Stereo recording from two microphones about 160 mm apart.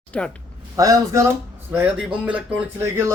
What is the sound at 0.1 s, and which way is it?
Speech, 10° left (ahead or behind).